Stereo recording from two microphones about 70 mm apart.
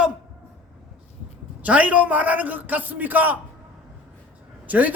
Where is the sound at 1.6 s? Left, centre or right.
Right.